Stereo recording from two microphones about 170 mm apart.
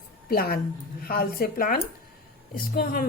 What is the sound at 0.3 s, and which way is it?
A woman's voice, 60° left (ahead or behind).